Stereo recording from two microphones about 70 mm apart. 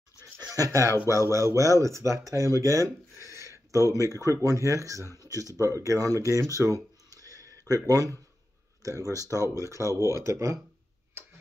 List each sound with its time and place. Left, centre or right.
0.4 s a sound: right
0.7 s speech: right
5.2 s speech: left
5.6 s speech: right
6.6 s a sound: right
8.8 s speech: right